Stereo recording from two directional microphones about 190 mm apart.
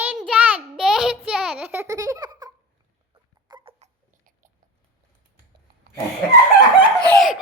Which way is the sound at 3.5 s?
30° right (ahead or behind).